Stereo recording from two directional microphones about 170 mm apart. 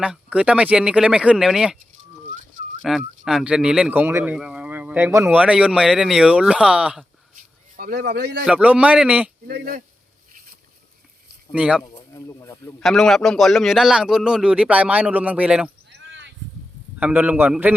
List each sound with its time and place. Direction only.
0.0 s a man's voice: 5° right (ahead or behind)
2.8 s speech: centre (ahead or behind)
7.8 s speech: 70° right (ahead or behind)
8.4 s speech: 10° right (ahead or behind)
9.5 s speech: 60° right (ahead or behind)
11.5 s speech: 5° right (ahead or behind)
11.8 s speech: 20° left (ahead or behind)
12.8 s a man's voice: centre (ahead or behind)
15.9 s a sound: 90° right
17.0 s speech: 10° right (ahead or behind)